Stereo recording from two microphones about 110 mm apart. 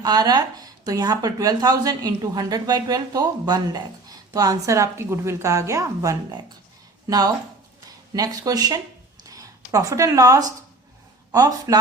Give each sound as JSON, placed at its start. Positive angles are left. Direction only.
{"t": 0.0, "sound": "speech", "side_deg": -40}
{"t": 7.9, "sound": "speech", "side_deg": -35}
{"t": 9.2, "sound": "a sound", "side_deg": -35}
{"t": 11.3, "sound": "speech", "side_deg": -35}